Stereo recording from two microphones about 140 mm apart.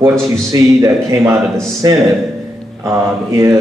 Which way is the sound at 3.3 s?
20° right (ahead or behind).